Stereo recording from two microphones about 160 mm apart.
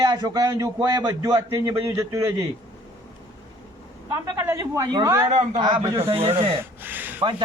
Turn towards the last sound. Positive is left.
turn(degrees=-10)  # may be behind; listen again after turning